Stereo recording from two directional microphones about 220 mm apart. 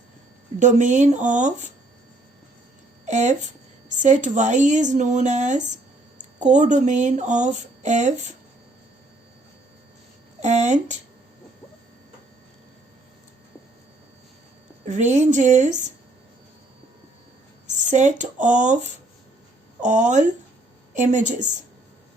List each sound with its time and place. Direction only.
0.6 s speech: 35° right (ahead or behind)
3.1 s speech: 30° right (ahead or behind)
10.4 s speech: 30° right (ahead or behind)
14.8 s speech: 30° right (ahead or behind)
17.7 s speech: 30° right (ahead or behind)